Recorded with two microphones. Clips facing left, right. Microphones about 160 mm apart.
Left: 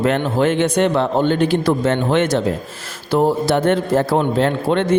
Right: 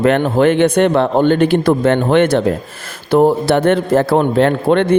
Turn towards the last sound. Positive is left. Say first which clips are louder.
# right 4 dB
turn(degrees=-60)  # may be behind; listen again after turning